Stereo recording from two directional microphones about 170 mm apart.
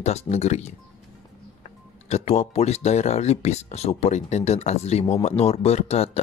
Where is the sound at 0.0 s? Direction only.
40° left (ahead or behind).